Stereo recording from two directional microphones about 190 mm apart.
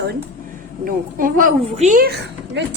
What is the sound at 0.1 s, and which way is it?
A woman's voice, 45° right (ahead or behind).